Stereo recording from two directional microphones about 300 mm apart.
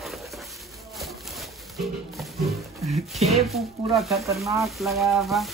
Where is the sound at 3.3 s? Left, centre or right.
Centre.